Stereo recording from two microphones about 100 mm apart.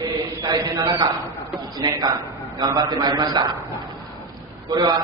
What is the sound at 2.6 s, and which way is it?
Speech, 35° right (ahead or behind).